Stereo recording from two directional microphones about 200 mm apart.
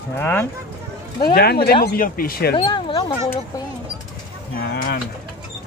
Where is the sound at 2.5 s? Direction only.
25° left (ahead or behind).